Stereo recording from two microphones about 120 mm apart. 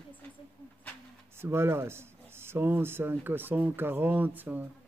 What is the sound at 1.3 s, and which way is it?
Speech, 20° right (ahead or behind).